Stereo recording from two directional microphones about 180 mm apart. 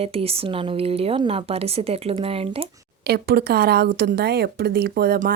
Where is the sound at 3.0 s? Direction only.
60° right (ahead or behind).